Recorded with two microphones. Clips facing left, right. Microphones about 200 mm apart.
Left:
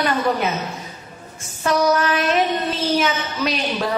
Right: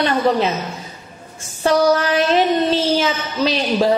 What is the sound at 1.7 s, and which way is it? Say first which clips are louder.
A woman's voice: right 3 dB; 30° right (ahead or behind).